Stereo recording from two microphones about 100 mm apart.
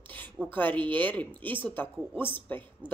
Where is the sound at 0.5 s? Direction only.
20° left (ahead or behind).